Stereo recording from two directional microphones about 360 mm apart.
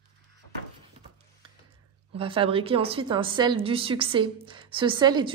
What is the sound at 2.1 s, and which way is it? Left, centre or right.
A woman's voice, centre.